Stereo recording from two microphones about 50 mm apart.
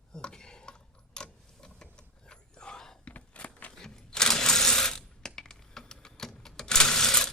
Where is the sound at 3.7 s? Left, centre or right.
Centre.